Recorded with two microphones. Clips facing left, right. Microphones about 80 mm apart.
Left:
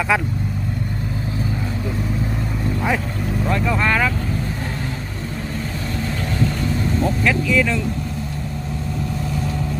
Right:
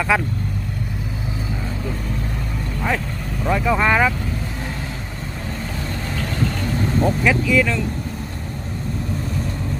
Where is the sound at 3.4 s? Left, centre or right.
Centre.